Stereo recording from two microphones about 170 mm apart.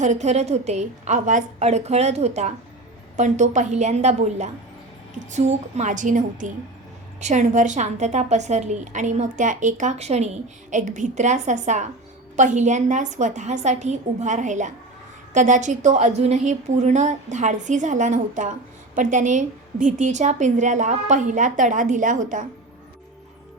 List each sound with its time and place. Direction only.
0.0 s a woman's voice: 45° right (ahead or behind)